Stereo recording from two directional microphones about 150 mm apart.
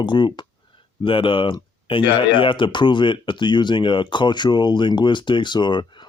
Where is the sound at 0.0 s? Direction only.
30° left (ahead or behind).